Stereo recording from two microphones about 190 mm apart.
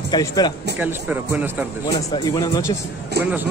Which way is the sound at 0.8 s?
10° right (ahead or behind).